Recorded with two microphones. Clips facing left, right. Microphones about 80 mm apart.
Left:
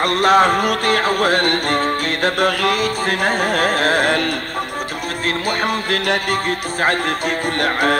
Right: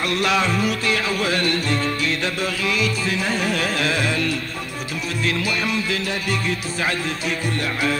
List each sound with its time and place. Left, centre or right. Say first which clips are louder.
0.0 s music: left 7 dB; left